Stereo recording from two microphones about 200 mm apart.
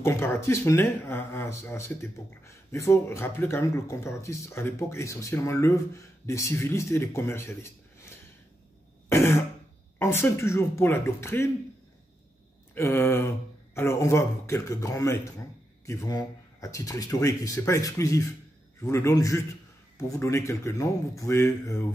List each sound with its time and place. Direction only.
0.0 s speech: 10° left (ahead or behind)
9.1 s throat clearing: 10° left (ahead or behind)
9.9 s speech: 15° left (ahead or behind)
12.7 s speech: 10° left (ahead or behind)